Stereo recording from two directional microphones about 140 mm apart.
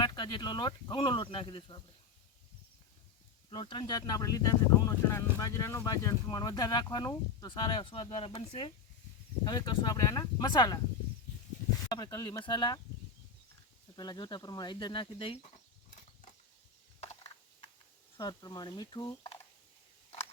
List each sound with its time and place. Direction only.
0.0 s speech: 30° left (ahead or behind)
3.5 s speech: 35° left (ahead or behind)
11.9 s speech: 30° left (ahead or behind)
13.9 s speech: 30° left (ahead or behind)
17.0 s a sound: 45° left (ahead or behind)
18.2 s speech: 30° left (ahead or behind)